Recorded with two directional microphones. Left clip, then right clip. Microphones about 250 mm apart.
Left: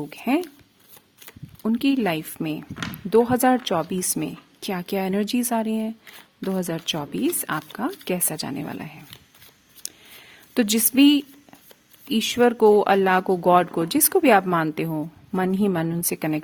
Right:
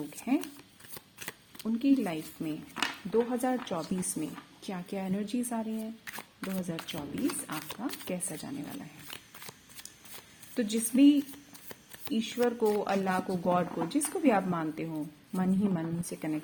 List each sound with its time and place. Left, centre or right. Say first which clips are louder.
0.3 s speech: left 9 dB; left
1.6 s speech: left 7 dB; left
9.8 s whispering: left 13 dB; left
10.5 s speech: left 9 dB; left